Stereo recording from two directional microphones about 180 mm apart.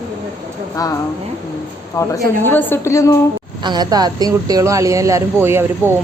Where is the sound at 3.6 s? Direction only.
25° right (ahead or behind).